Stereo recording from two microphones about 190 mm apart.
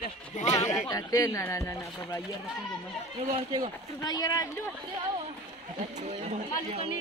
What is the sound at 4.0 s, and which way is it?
Speech, 20° left (ahead or behind).